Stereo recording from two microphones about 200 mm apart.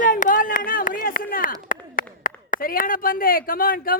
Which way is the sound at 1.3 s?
45° left (ahead or behind).